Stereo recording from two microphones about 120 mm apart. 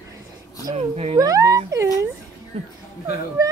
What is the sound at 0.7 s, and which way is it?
Speech, 60° right (ahead or behind).